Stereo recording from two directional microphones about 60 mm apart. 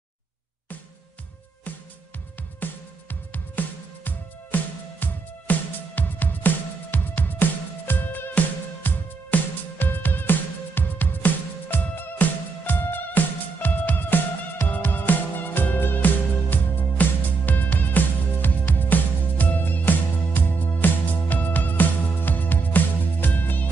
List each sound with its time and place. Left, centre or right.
2.6 s music: left